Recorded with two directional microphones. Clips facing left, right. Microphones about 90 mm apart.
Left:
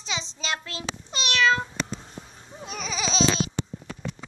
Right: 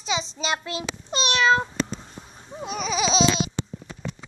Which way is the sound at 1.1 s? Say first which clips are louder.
Right 3 dB; 25° right (ahead or behind).